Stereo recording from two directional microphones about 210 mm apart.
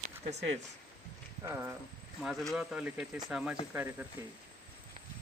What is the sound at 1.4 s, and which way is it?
Speech, 10° right (ahead or behind).